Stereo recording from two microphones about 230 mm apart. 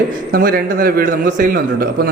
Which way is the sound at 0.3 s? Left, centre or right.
Right.